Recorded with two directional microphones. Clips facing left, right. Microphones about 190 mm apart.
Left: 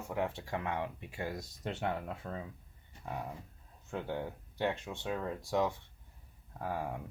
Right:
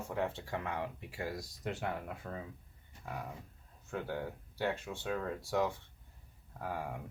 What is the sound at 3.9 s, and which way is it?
Speech, 20° left (ahead or behind).